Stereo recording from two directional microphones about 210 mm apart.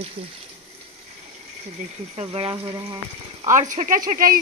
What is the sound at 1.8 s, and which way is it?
Speech, 30° right (ahead or behind).